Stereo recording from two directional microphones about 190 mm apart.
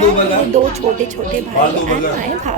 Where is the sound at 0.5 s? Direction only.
35° right (ahead or behind).